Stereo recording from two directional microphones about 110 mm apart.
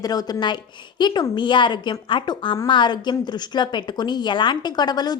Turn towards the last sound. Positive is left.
turn(degrees=40)  # may be behind; listen again after turning